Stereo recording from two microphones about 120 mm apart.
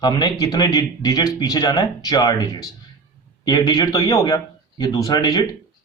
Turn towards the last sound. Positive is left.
turn(degrees=30)  # may be behind; listen again after turning